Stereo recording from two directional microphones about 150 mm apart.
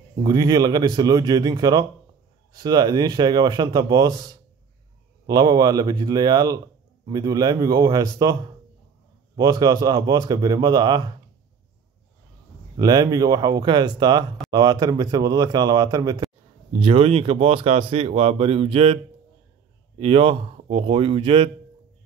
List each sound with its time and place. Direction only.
0.2 s a man's voice: 25° right (ahead or behind)
5.2 s a man's voice: 25° right (ahead or behind)
9.4 s a man's voice: 25° right (ahead or behind)
12.7 s a man's voice: 25° right (ahead or behind)
16.8 s speech: 35° right (ahead or behind)
20.0 s speech: 40° right (ahead or behind)